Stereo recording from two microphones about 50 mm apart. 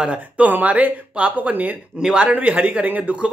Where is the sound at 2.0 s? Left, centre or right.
Centre.